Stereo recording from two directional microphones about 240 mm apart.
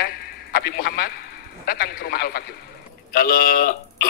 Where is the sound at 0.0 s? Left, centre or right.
Left.